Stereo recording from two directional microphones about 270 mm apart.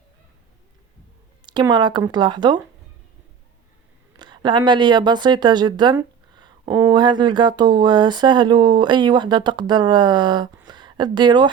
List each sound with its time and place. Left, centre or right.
1.5 s speech: centre
4.2 s speech: centre